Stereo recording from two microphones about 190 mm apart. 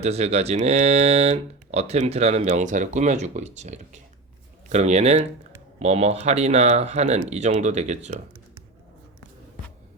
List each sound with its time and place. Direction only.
0.0 s speech: 35° right (ahead or behind)